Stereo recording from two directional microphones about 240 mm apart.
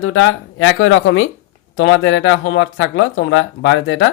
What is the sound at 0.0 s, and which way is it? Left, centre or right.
Speech, left.